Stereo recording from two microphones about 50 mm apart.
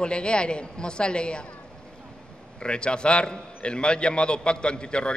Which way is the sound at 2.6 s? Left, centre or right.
Centre.